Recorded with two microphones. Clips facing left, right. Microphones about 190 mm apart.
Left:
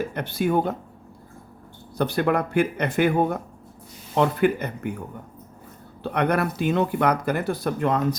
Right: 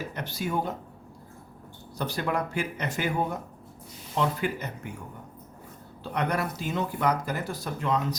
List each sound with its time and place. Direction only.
0.0 s speech: 55° left (ahead or behind)
2.0 s speech: 60° left (ahead or behind)